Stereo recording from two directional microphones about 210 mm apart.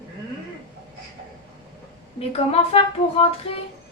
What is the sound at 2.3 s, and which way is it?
Music, 25° left (ahead or behind).